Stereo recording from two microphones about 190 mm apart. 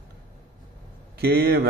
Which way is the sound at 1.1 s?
55° right (ahead or behind).